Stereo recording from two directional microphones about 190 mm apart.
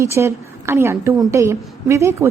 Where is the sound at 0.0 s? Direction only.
15° right (ahead or behind).